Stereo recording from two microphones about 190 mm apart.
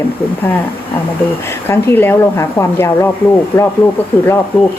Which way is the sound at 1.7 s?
10° left (ahead or behind).